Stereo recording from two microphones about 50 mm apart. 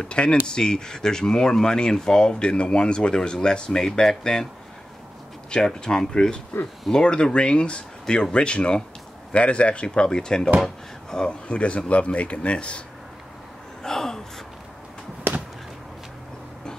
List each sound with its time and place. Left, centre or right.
0.0 s speech: centre
5.8 s speech: centre
6.5 s speech: left
6.9 s speech: centre
13.8 s gasp: centre
15.3 s a sound: right